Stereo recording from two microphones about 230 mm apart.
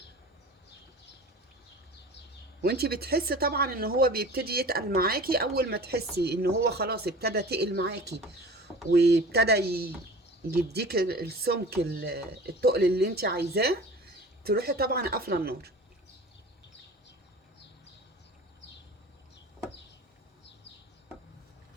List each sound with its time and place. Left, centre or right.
2.6 s speech: right